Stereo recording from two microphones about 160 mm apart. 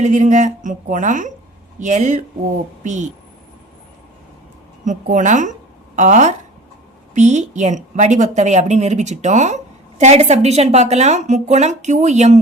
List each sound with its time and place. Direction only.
0.0 s a woman's voice: 50° right (ahead or behind)
4.9 s a woman's voice: 50° right (ahead or behind)